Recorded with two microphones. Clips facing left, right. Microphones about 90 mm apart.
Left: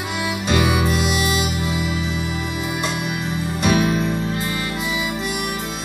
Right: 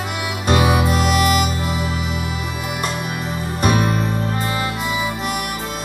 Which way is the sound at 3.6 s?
45° right (ahead or behind).